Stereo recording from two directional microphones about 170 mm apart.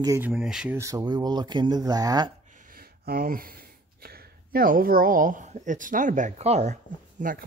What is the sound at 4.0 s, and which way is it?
Speech, 60° right (ahead or behind).